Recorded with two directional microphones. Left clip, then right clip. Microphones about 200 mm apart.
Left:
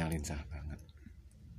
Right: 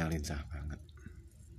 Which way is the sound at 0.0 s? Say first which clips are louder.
Right 1 dB; 5° right (ahead or behind).